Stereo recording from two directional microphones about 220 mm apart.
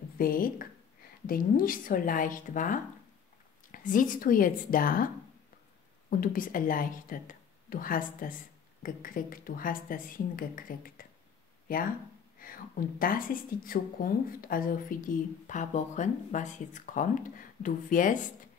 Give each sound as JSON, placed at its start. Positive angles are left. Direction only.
{"t": 0.2, "sound": "speech", "side_deg": 40}
{"t": 12.4, "sound": "a sound", "side_deg": 40}
{"t": 13.0, "sound": "speech", "side_deg": 40}